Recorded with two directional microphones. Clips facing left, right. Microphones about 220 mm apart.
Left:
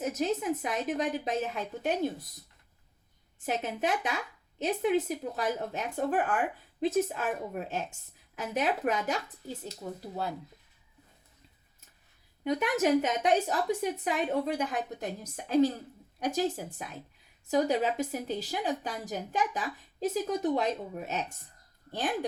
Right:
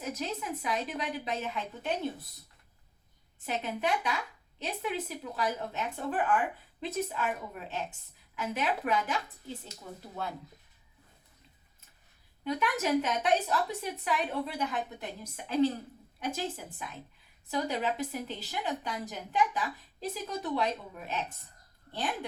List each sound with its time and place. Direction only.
0.0 s a woman's voice: 45° left (ahead or behind)
3.4 s a woman's voice: 45° left (ahead or behind)
12.5 s a woman's voice: 45° left (ahead or behind)